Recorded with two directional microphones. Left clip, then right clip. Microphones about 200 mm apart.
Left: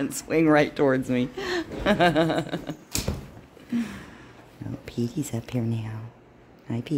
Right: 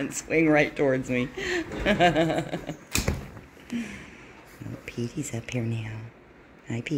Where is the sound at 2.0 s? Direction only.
55° left (ahead or behind).